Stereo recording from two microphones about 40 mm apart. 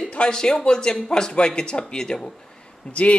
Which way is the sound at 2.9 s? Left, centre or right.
Left.